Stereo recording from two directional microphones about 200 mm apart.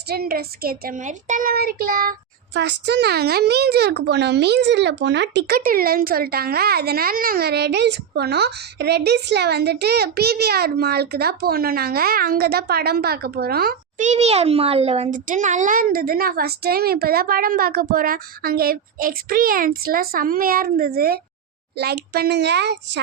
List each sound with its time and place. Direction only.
0.1 s a child's voice: 50° right (ahead or behind)
14.1 s a child's voice: 30° right (ahead or behind); by 23.0 s 60° right (ahead or behind)